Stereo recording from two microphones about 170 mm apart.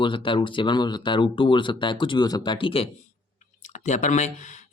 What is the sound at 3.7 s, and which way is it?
Speech, 45° left (ahead or behind).